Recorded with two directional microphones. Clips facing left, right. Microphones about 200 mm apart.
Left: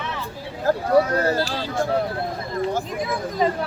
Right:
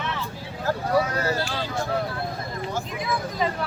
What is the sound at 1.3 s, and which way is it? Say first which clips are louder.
Speech: left 4 dB; 40° left (ahead or behind).